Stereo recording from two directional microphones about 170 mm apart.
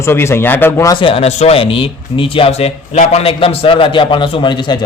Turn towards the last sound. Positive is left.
turn(degrees=30)  # may be behind; listen again after turning